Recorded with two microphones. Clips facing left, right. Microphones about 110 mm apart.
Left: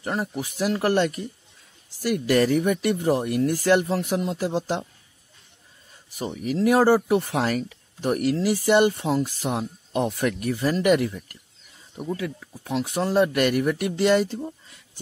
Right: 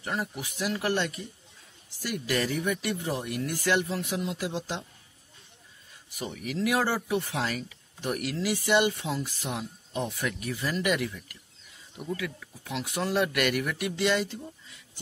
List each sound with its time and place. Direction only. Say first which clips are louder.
0.0 s speech: left 5 dB; 40° left (ahead or behind)
6.1 s speech: left 7 dB; 35° left (ahead or behind)
11.9 s speech: left 5 dB; 30° left (ahead or behind)